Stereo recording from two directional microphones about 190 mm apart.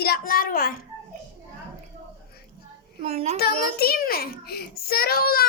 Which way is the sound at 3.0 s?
30° right (ahead or behind).